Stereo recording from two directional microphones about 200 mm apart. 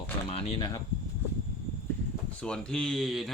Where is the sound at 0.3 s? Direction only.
30° left (ahead or behind).